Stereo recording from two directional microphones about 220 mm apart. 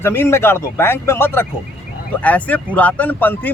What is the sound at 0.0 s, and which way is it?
Speech, 10° left (ahead or behind).